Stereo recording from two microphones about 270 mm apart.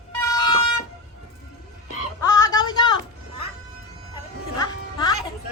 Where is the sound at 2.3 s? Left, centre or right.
Centre.